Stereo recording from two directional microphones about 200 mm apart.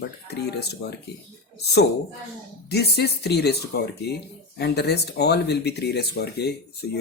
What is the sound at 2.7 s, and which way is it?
Speech, 55° left (ahead or behind).